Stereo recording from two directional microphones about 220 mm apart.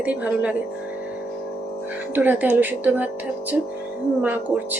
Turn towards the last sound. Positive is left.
turn(degrees=-5)  # may be behind; listen again after turning